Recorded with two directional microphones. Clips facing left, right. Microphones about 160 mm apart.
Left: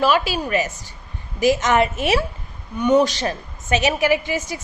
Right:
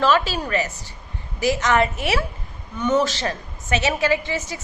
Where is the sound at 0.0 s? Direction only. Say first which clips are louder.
Left 1 dB; 10° left (ahead or behind).